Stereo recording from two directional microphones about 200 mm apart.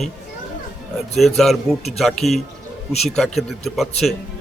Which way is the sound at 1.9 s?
Centre (ahead or behind).